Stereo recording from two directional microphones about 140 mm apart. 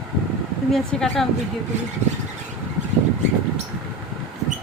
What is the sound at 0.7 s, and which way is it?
Speech, 5° left (ahead or behind).